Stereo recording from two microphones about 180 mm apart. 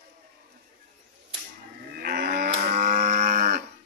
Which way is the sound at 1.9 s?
55° right (ahead or behind).